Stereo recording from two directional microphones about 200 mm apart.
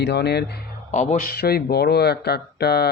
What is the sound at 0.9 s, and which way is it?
Speech, 35° left (ahead or behind).